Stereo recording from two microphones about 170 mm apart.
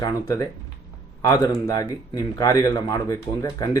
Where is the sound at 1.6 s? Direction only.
20° left (ahead or behind).